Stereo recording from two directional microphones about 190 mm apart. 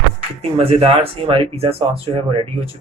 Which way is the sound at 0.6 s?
30° right (ahead or behind).